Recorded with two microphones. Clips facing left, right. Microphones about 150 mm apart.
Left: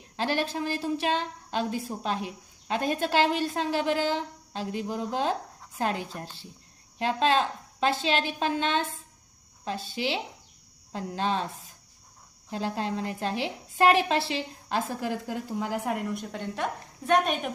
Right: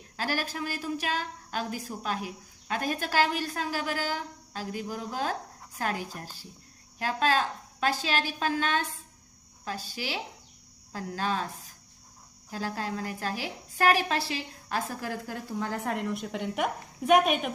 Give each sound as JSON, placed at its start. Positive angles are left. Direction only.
{"t": 0.2, "sound": "a woman's voice", "side_deg": 25}